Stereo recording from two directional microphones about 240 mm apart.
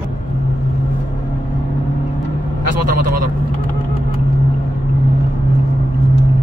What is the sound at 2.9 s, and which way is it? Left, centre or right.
Vehicle, right.